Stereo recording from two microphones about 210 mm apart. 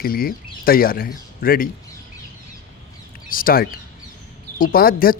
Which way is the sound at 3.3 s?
45° left (ahead or behind).